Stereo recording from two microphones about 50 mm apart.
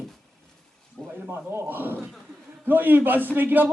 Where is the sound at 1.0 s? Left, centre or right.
Centre.